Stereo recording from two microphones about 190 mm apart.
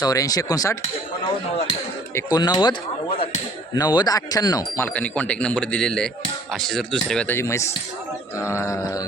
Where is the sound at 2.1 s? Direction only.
20° left (ahead or behind).